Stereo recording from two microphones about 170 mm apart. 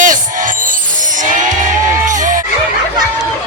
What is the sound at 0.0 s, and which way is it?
Music, 50° right (ahead or behind).